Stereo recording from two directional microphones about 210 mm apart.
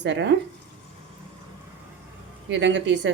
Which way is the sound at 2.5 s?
60° right (ahead or behind).